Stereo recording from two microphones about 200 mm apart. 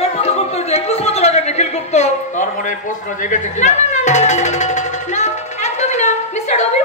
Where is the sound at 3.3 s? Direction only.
35° left (ahead or behind).